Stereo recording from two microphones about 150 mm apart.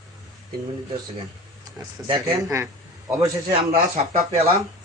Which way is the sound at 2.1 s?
30° right (ahead or behind).